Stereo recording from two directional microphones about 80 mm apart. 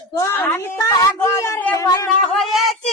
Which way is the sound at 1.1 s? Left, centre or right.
Left.